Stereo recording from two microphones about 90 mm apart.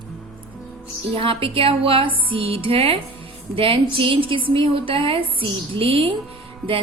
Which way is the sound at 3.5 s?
80° right.